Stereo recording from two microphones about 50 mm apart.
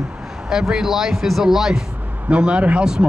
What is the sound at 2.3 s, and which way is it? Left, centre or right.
Speech, right.